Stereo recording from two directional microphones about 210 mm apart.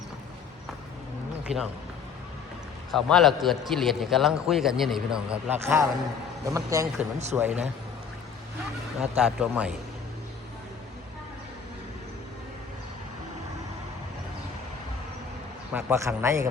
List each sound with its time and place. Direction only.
1.5 s speech: 30° right (ahead or behind)
2.9 s a man's voice: centre (ahead or behind)
9.0 s a man's voice: 5° right (ahead or behind)
15.7 s a man's voice: 10° right (ahead or behind)